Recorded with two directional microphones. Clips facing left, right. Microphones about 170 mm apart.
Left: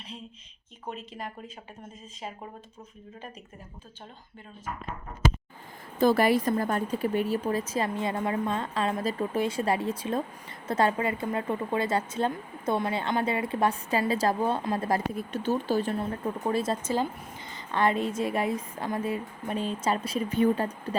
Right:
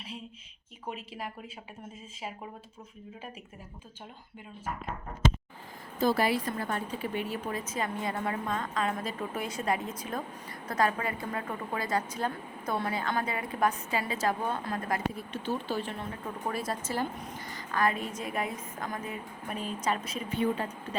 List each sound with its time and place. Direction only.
0.9 s speech: 5° right (ahead or behind)
6.0 s speech: 50° left (ahead or behind)
7.7 s a woman's voice: 30° left (ahead or behind)
16.5 s a woman's voice: 25° left (ahead or behind); by 20.7 s 40° left (ahead or behind)